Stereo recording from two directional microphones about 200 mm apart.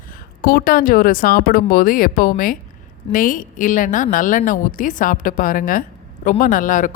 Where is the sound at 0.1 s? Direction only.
45° left (ahead or behind).